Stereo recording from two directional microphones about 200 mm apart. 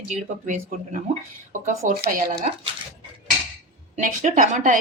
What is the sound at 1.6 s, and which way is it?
Speech, 45° right (ahead or behind).